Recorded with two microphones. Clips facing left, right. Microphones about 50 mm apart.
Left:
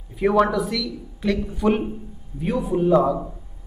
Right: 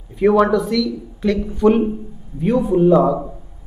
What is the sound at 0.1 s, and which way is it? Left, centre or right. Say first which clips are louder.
A man's voice: right 5 dB; centre.